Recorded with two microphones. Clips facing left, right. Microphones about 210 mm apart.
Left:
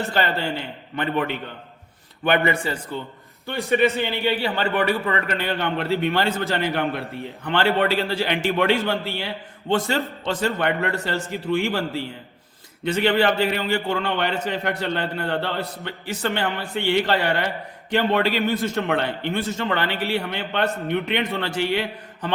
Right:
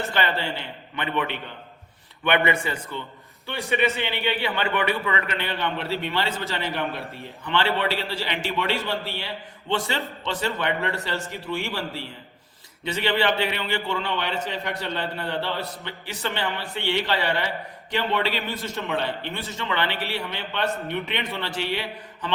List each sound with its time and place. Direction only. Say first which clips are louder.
0.1 s a man's voice: left 3 dB; 45° left (ahead or behind)